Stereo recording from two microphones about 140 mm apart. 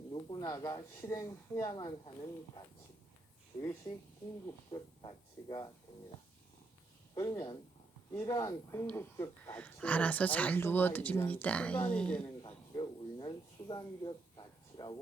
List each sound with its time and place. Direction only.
0.1 s speech: 35° left (ahead or behind)
3.9 s speech: 25° left (ahead or behind)
4.7 s speech: 45° left (ahead or behind)
5.0 s speech: 35° left (ahead or behind)
7.1 s speech: 30° left (ahead or behind); by 12.3 s 5° left (ahead or behind)
12.4 s speech: 35° left (ahead or behind)